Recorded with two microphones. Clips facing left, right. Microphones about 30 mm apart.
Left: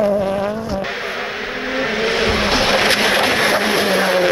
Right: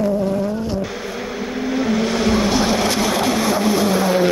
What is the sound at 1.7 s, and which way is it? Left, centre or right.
Vehicle, left.